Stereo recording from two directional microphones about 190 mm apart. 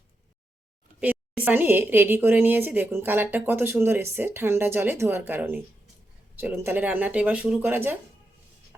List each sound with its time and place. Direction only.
0.9 s a woman's voice: 10° right (ahead or behind)